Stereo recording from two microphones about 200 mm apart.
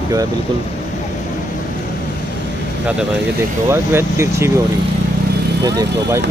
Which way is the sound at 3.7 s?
15° right (ahead or behind).